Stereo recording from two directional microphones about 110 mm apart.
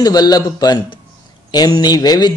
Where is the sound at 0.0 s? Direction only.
35° left (ahead or behind).